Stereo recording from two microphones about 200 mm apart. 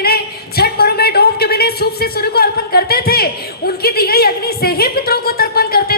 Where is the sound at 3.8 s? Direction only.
50° left (ahead or behind).